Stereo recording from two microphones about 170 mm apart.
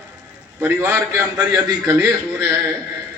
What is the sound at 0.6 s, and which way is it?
Speech, 15° right (ahead or behind).